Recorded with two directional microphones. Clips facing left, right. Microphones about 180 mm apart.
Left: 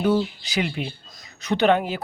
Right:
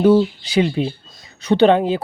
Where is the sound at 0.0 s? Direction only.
30° right (ahead or behind).